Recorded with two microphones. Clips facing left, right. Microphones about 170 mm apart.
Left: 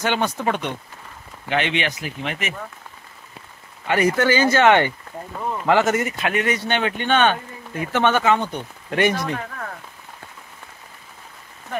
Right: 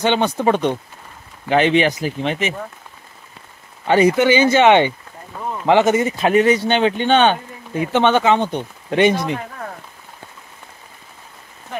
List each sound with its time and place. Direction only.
0.0 s speech: 25° right (ahead or behind)
3.8 s speech: 30° right (ahead or behind)